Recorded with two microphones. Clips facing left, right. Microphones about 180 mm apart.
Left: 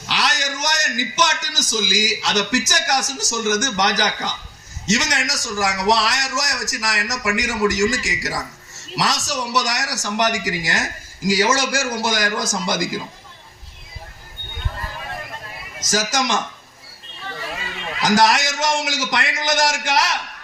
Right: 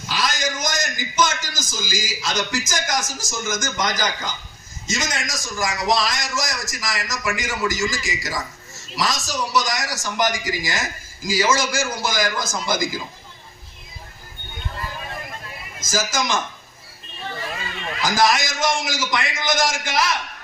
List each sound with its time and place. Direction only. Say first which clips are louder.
0.0 s a man's voice: even; 70° left (ahead or behind)
15.8 s a man's voice: left 2 dB; 75° left (ahead or behind)
18.0 s a man's voice: left 3 dB; 70° left (ahead or behind)